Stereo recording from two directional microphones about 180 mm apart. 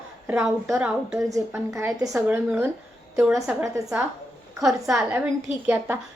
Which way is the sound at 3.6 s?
15° right (ahead or behind).